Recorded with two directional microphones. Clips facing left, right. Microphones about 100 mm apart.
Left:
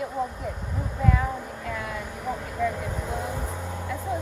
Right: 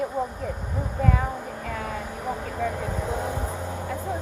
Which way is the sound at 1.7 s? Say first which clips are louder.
Even; 40° right (ahead or behind).